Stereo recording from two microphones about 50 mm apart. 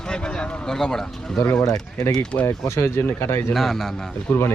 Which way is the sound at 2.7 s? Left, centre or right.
Left.